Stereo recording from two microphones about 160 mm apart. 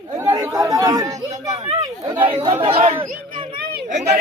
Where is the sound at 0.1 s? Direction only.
20° right (ahead or behind).